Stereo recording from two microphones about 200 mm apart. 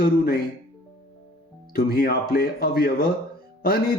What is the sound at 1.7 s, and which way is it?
Speech, 50° left (ahead or behind).